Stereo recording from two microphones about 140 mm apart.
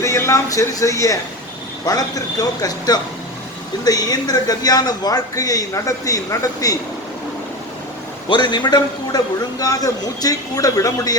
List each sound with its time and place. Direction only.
0.0 s speech: 20° left (ahead or behind)
8.3 s speech: 35° left (ahead or behind)